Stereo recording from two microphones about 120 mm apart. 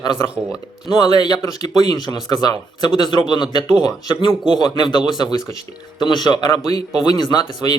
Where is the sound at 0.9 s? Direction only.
35° left (ahead or behind).